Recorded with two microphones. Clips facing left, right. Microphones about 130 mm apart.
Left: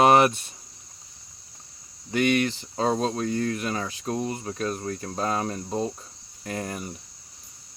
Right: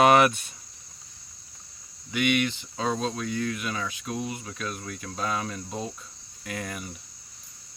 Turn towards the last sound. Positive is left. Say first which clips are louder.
# left 3 dB
turn(degrees=35)  # may be behind; listen again after turning